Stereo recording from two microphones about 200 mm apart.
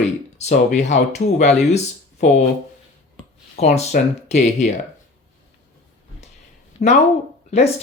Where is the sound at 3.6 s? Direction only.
35° left (ahead or behind).